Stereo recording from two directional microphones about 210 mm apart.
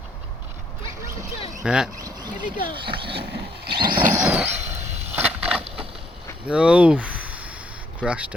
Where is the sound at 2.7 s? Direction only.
25° right (ahead or behind).